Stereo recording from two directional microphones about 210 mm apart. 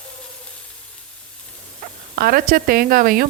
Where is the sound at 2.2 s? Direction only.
45° right (ahead or behind).